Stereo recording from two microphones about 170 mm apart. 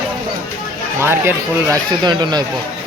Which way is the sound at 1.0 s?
15° right (ahead or behind).